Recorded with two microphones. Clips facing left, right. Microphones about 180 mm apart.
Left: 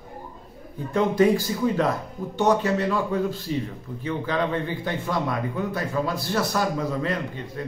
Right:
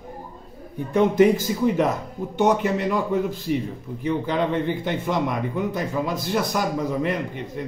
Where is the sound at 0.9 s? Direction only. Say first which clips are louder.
Right 3 dB; 20° right (ahead or behind).